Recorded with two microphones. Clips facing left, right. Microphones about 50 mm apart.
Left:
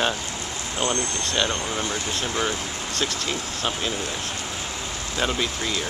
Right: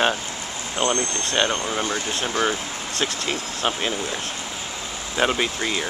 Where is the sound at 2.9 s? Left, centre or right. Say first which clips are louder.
Right 2 dB; right.